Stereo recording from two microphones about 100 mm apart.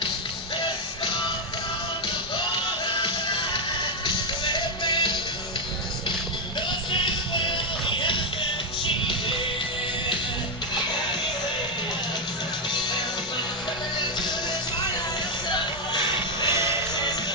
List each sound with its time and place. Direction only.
3.0 s music: 55° left (ahead or behind)
6.6 s music: 50° left (ahead or behind)
14.0 s music: 45° left (ahead or behind)
15.9 s music: 50° left (ahead or behind)
16.5 s music: 25° right (ahead or behind)
16.9 s music: 45° left (ahead or behind)